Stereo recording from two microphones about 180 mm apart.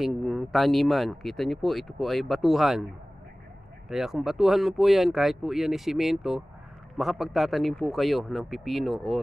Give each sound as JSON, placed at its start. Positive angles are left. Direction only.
{"t": 0.0, "sound": "speech", "side_deg": 0}
{"t": 3.9, "sound": "speech", "side_deg": 0}